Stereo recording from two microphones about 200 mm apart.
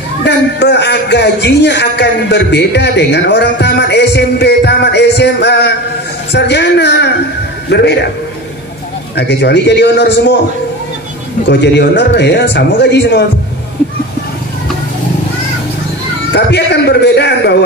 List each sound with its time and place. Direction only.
0.2 s a man's voice: 60° left (ahead or behind)
9.1 s a man's voice: 60° left (ahead or behind)
11.4 s a man's voice: 60° left (ahead or behind)
16.3 s a man's voice: 55° left (ahead or behind)